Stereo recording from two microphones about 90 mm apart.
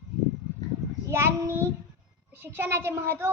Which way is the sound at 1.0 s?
30° right (ahead or behind).